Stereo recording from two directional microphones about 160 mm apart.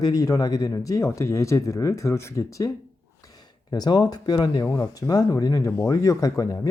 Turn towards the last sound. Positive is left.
turn(degrees=20)  # may be behind; listen again after turning